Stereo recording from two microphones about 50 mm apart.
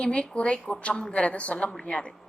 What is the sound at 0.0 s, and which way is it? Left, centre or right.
A woman's voice, left.